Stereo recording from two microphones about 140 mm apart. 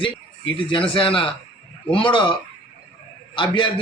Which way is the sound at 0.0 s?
35° left (ahead or behind).